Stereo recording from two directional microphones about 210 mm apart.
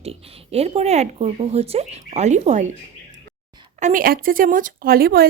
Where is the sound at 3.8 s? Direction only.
40° right (ahead or behind).